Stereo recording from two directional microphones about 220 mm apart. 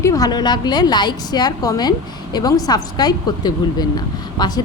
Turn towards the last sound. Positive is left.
turn(degrees=20)  # may be behind; listen again after turning